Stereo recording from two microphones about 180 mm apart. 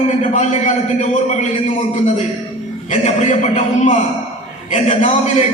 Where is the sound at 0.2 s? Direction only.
40° left (ahead or behind).